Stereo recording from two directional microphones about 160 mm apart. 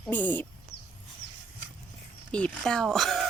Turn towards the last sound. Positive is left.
turn(degrees=0)  # may be behind; listen again after turning